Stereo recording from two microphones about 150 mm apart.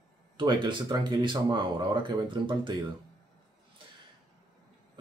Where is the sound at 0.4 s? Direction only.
30° right (ahead or behind).